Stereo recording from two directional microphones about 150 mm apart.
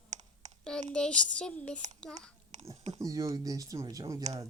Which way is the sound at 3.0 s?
25° right (ahead or behind).